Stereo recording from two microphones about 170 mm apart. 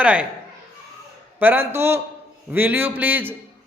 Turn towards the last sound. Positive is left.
turn(degrees=-10)  # may be behind; listen again after turning